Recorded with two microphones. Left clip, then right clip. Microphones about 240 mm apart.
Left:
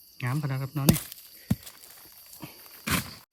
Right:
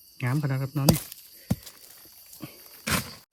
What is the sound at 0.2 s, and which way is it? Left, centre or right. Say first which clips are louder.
Speech: right 3 dB; centre.